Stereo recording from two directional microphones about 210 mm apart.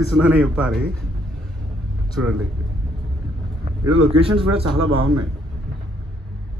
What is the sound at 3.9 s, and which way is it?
A man's voice, 30° right (ahead or behind).